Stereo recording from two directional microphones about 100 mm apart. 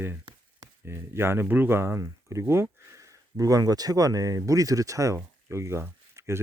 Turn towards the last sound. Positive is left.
turn(degrees=-25)  # may be behind; listen again after turning